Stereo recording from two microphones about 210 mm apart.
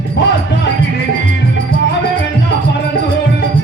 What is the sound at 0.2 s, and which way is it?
Music, 55° left (ahead or behind).